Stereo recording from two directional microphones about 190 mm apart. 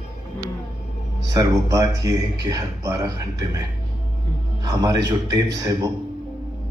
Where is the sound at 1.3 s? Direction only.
20° right (ahead or behind).